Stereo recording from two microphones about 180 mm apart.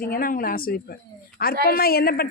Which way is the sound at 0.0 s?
55° left (ahead or behind).